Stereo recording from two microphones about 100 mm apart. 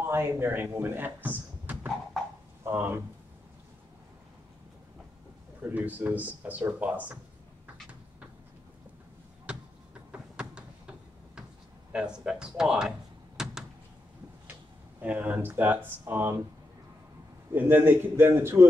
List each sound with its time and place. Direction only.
0.0 s speech: 25° right (ahead or behind)
5.6 s speech: 15° right (ahead or behind)
10.5 s door: 10° right (ahead or behind)
11.9 s speech: 10° right (ahead or behind)
13.4 s door: 5° right (ahead or behind)
14.5 s speech: 15° right (ahead or behind)
17.5 s a man's voice: 20° right (ahead or behind)